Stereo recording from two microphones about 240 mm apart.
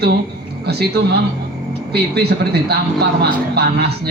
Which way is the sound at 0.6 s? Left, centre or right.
Right.